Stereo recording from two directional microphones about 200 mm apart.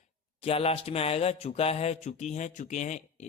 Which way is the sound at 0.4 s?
30° left (ahead or behind).